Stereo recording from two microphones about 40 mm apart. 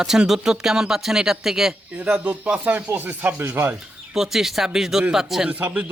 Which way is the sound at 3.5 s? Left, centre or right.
Right.